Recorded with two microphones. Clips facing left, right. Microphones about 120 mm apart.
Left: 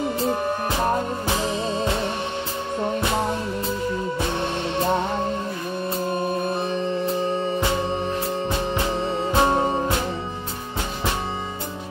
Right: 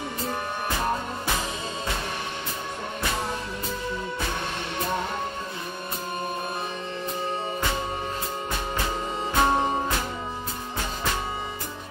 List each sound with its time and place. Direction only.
0.2 s music: 25° left (ahead or behind)
4.7 s music: 30° left (ahead or behind)
9.4 s music: 10° left (ahead or behind)